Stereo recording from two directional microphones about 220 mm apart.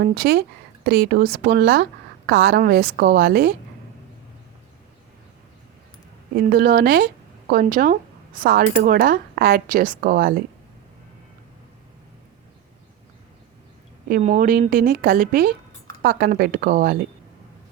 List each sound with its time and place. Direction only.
0.0 s speech: 45° right (ahead or behind)
6.3 s speech: 40° right (ahead or behind)
14.1 s speech: 35° right (ahead or behind)